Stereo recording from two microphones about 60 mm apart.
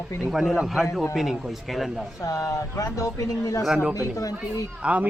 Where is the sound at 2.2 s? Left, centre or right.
Left.